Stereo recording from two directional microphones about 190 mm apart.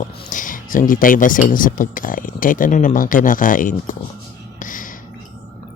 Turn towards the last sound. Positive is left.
turn(degrees=45)  # may be behind; listen again after turning